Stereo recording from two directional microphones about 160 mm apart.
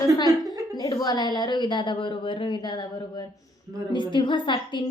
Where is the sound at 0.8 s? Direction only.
25° left (ahead or behind).